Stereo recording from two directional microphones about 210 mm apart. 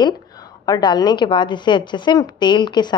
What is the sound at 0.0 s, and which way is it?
A woman's voice, 20° left (ahead or behind).